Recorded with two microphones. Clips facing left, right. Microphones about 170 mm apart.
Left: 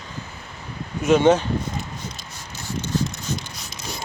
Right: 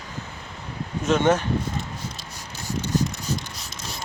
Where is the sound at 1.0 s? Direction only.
15° left (ahead or behind).